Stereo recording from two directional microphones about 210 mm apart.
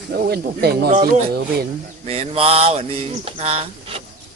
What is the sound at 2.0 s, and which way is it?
Mantra, 30° right (ahead or behind).